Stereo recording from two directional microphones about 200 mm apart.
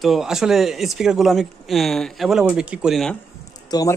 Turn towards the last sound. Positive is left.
turn(degrees=20)  # may be behind; listen again after turning